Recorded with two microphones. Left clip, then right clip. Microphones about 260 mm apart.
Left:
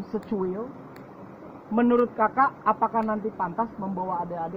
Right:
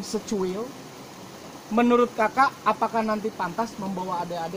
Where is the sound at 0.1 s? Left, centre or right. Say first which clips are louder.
Right 1 dB; centre.